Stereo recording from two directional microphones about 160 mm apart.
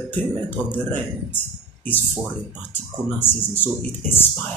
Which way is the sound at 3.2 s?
15° left (ahead or behind).